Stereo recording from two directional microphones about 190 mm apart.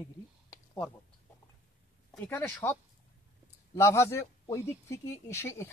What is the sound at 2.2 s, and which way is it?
Speech, 10° left (ahead or behind).